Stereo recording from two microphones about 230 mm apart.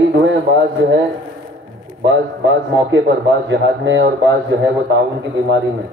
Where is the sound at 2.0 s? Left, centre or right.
Right.